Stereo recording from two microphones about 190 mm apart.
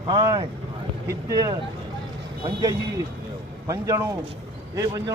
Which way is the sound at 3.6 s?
15° right (ahead or behind).